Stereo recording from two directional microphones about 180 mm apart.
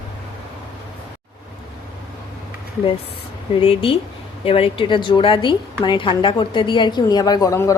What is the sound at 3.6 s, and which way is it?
A woman's voice, 30° left (ahead or behind).